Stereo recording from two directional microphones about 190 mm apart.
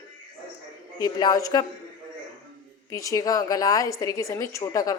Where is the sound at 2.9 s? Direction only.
15° left (ahead or behind).